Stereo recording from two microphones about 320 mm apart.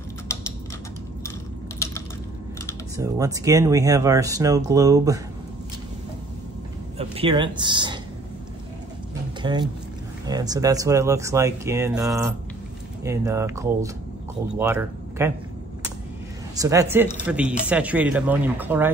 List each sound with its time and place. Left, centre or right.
3.0 s speech: centre
7.0 s speech: centre
9.4 s speech: centre
16.5 s speech: centre